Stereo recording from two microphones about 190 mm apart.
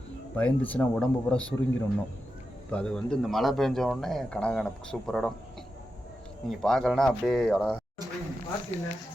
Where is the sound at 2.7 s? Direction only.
5° left (ahead or behind).